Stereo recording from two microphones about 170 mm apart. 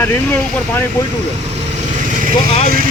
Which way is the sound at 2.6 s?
55° right (ahead or behind).